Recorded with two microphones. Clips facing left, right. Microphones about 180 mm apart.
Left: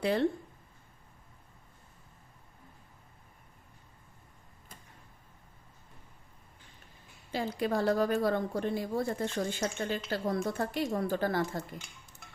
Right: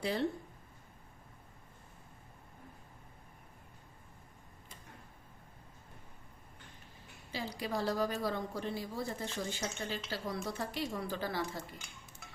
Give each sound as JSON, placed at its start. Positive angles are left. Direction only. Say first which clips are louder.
{"t": 0.0, "sound": "speech", "louder": "left 6 dB", "side_deg": 60}
{"t": 7.3, "sound": "a woman's voice", "louder": "left 7 dB", "side_deg": 55}